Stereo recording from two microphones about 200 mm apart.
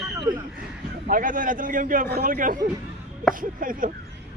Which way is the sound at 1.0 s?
40° right (ahead or behind).